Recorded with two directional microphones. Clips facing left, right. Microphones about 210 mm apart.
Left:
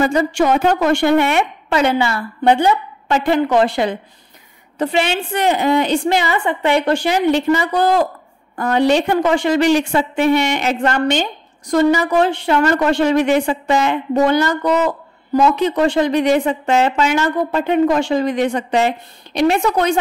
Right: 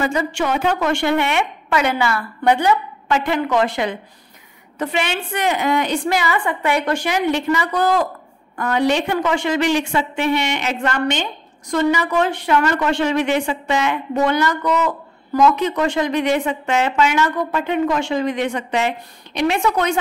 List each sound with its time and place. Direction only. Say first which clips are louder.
0.0 s speech: left 5 dB; 40° left (ahead or behind)